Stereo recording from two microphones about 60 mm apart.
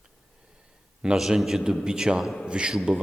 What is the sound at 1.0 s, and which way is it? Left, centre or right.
Speech, centre.